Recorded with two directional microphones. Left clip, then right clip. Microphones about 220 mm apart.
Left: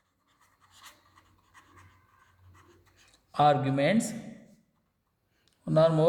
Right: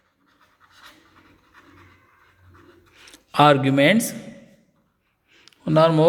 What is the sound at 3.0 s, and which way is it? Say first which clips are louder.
Speech: right 8 dB; 25° right (ahead or behind).